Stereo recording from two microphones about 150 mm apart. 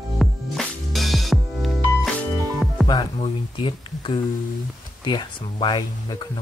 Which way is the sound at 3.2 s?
35° left (ahead or behind).